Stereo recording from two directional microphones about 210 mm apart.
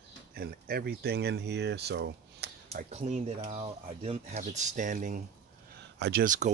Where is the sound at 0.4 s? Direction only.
45° right (ahead or behind).